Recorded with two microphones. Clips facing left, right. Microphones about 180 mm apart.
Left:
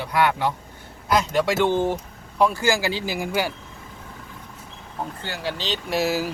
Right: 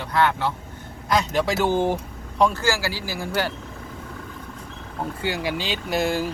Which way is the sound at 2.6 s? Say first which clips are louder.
Left 2 dB; 15° left (ahead or behind).